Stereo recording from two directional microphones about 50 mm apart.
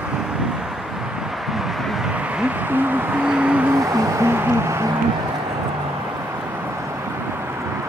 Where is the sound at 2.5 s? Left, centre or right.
Right.